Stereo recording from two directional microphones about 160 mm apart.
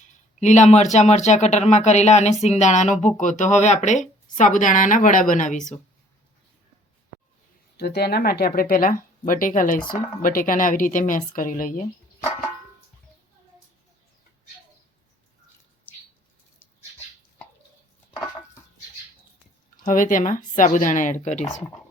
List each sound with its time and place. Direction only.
0.3 s speech: 45° left (ahead or behind)
7.8 s speech: 85° left; by 11.9 s 60° left (ahead or behind)
15.9 s bird: 10° left (ahead or behind)
19.8 s speech: 55° left (ahead or behind)